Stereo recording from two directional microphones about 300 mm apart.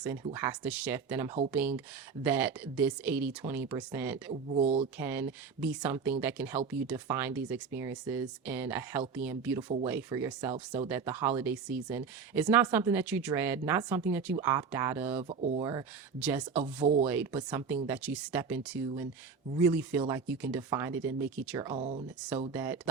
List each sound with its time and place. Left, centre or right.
0.0 s speech: centre
4.3 s speech: right
4.9 s speech: centre
10.5 s speech: centre
10.8 s speech: centre
15.3 s speech: right
16.2 s speech: centre
16.8 s speech: right
17.1 s speech: centre
22.5 s speech: centre